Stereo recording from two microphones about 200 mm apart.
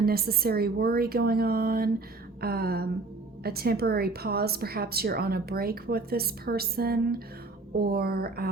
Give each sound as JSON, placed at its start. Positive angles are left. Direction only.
{"t": 0.0, "sound": "a woman's voice", "side_deg": -50}